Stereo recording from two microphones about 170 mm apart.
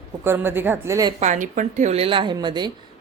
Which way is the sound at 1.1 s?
45° right (ahead or behind).